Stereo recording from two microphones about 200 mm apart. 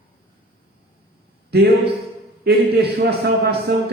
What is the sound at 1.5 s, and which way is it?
A man's voice, 55° right (ahead or behind).